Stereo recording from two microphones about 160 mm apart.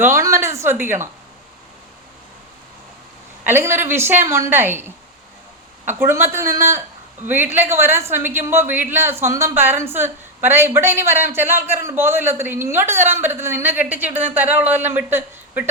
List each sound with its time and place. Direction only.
0.0 s a woman's voice: 20° right (ahead or behind)
3.4 s a woman's voice: 15° right (ahead or behind)
6.0 s a woman's voice: 15° right (ahead or behind)